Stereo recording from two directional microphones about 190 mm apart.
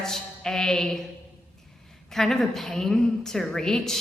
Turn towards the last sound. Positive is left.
turn(degrees=0)  # may be behind; listen again after turning